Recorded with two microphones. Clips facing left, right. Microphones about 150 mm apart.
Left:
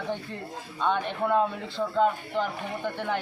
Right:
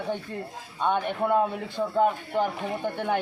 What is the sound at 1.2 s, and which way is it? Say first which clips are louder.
A man's voice: even; 15° right (ahead or behind).